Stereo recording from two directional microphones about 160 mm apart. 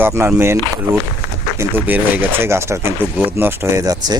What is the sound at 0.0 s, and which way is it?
Speech, 15° right (ahead or behind).